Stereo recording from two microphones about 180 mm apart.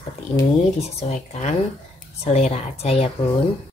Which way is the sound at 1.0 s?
40° left (ahead or behind).